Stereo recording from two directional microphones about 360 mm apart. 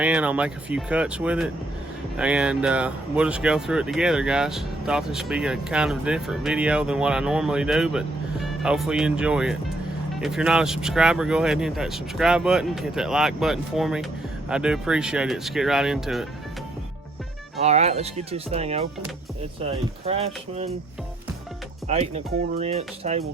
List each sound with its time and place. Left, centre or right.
0.0 s speech: centre
17.6 s speech: centre
20.1 s speech: centre
21.8 s speech: centre